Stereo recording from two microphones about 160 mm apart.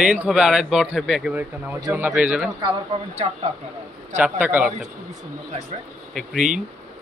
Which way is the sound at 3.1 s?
40° right (ahead or behind).